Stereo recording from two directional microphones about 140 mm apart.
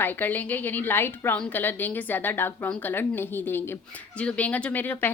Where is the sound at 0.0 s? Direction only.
15° left (ahead or behind).